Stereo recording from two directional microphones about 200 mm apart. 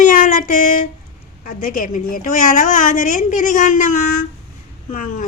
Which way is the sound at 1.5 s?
45° left (ahead or behind).